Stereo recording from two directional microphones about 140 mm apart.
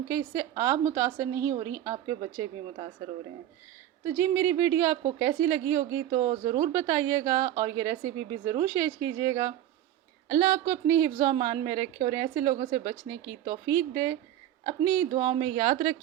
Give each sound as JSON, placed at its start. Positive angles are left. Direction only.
{"t": 0.1, "sound": "a woman's voice", "side_deg": -20}
{"t": 2.4, "sound": "a woman's voice", "side_deg": -40}
{"t": 4.0, "sound": "a woman's voice", "side_deg": -15}